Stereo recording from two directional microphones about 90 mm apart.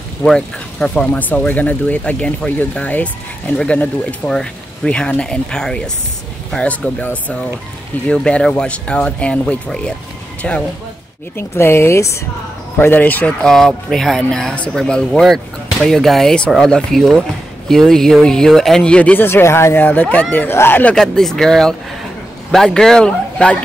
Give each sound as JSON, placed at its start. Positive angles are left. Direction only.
{"t": 0.2, "sound": "speech", "side_deg": 10}
{"t": 11.3, "sound": "speech", "side_deg": 30}
{"t": 13.4, "sound": "speech", "side_deg": 5}
{"t": 19.2, "sound": "speech", "side_deg": 25}
{"t": 20.9, "sound": "speech", "side_deg": 5}